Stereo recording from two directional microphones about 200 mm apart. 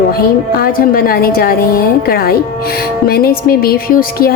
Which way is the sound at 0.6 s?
45° left (ahead or behind).